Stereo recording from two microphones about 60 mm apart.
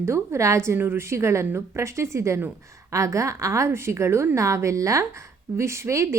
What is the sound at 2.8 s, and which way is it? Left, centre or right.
A woman's voice, right.